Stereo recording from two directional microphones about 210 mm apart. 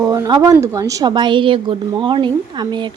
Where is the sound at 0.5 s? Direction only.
15° right (ahead or behind).